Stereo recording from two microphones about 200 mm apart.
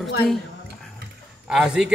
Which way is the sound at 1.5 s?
5° right (ahead or behind).